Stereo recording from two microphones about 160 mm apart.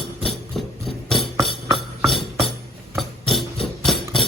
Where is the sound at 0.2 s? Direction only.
Centre (ahead or behind).